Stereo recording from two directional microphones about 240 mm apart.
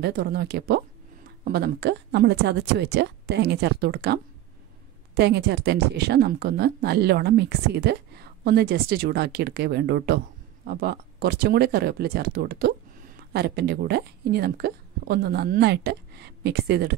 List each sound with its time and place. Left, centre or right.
0.0 s speech: right